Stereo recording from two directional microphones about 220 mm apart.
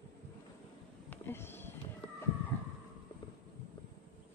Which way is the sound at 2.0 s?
25° left (ahead or behind).